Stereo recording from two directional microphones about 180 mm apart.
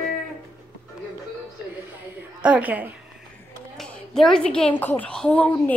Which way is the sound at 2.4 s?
10° right (ahead or behind).